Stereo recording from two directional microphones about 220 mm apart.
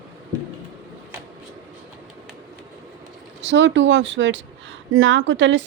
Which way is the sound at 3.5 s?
55° right (ahead or behind).